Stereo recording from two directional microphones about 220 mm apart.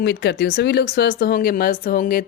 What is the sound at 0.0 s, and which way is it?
Speech, 50° left (ahead or behind).